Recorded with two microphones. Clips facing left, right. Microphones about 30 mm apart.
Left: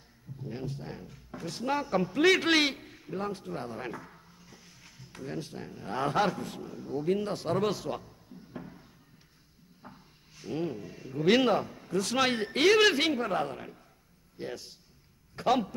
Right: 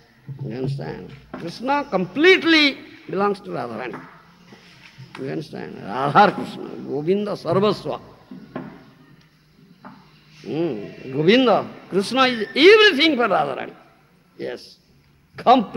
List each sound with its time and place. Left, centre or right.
0.4 s a sound: right
0.7 s a woman's voice: right
1.4 s a man's voice: right
5.9 s a man's voice: right
6.1 s a woman's voice: right
6.9 s a man's voice: right
7.5 s a woman's voice: right
7.9 s a sound: right
9.8 s a sound: right
10.6 s a woman's voice: right
11.2 s a man's voice: right